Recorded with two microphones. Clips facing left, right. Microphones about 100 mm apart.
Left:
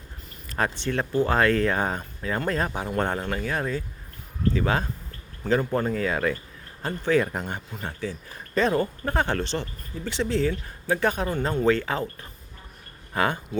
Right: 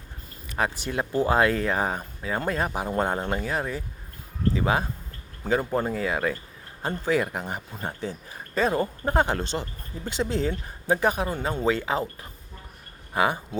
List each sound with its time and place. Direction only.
0.9 s speech: 10° right (ahead or behind)
3.2 s speech: 25° right (ahead or behind)
3.4 s speech: 10° right (ahead or behind)
10.2 s speech: 35° right (ahead or behind)
10.5 s speech: 20° right (ahead or behind)
13.1 s speech: 15° right (ahead or behind)